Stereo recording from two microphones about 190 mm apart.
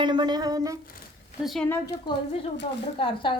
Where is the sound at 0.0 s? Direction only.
25° right (ahead or behind).